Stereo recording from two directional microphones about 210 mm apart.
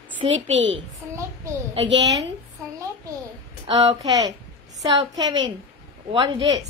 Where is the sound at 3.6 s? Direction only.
25° right (ahead or behind).